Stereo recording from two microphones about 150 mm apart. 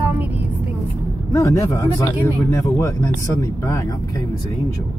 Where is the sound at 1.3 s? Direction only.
20° left (ahead or behind).